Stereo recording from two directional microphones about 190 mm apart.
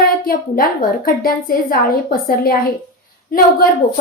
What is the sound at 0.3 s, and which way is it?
A woman's voice, 50° left (ahead or behind).